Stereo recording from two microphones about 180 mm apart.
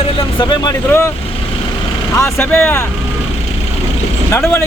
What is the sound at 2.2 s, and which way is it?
Speech, 15° left (ahead or behind).